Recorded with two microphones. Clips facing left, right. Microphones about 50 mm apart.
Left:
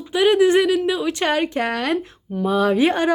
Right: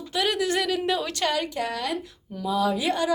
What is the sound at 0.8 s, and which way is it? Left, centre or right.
Speech, centre.